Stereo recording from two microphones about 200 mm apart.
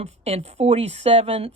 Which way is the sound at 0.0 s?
30° right (ahead or behind).